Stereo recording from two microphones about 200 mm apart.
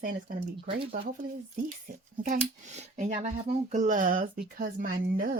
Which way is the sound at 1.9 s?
40° right (ahead or behind).